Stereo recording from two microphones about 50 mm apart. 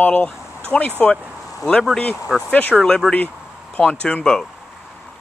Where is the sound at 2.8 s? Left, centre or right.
Centre.